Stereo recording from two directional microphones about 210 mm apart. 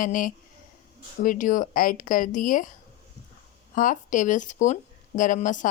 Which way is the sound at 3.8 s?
40° left (ahead or behind).